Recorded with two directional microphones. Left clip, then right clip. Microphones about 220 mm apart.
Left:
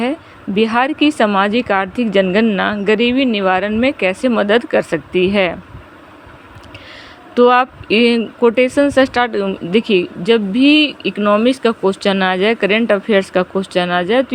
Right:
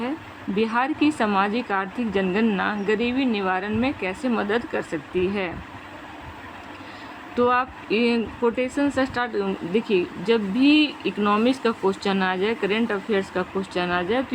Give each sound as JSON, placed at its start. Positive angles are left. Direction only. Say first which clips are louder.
{"t": 0.5, "sound": "a woman's voice", "louder": "left 8 dB", "side_deg": 30}
{"t": 7.3, "sound": "speech", "louder": "left 10 dB", "side_deg": 30}